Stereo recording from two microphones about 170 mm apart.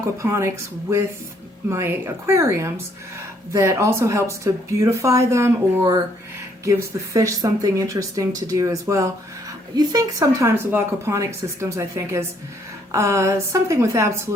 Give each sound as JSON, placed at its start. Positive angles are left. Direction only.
{"t": 0.2, "sound": "speech", "side_deg": -15}